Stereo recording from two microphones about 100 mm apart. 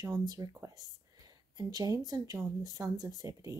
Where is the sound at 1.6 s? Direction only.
40° right (ahead or behind).